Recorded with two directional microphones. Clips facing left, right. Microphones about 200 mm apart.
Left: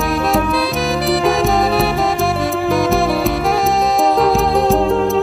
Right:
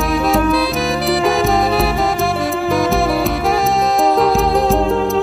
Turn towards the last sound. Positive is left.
turn(degrees=0)  # may be behind; listen again after turning